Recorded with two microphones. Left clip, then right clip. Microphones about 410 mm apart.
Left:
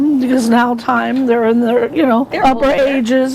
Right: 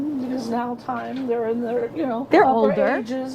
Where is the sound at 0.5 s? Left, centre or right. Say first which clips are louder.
Left 12 dB; left.